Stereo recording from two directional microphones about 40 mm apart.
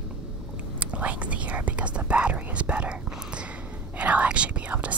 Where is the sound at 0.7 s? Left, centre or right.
Right.